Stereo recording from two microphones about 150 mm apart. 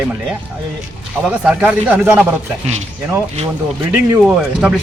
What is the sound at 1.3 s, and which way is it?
Speech, 10° right (ahead or behind).